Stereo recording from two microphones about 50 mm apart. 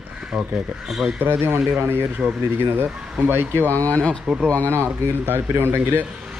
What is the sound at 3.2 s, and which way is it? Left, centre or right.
Speech, right.